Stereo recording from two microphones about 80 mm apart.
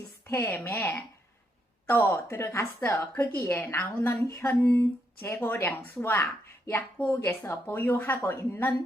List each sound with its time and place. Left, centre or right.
0.3 s a woman's voice: left
7.2 s speech: left